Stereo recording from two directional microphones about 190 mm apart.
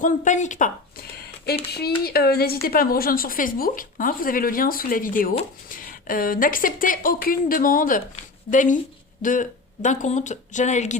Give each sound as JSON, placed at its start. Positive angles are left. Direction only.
{"t": 0.0, "sound": "speech", "side_deg": 40}
{"t": 2.0, "sound": "speech", "side_deg": 55}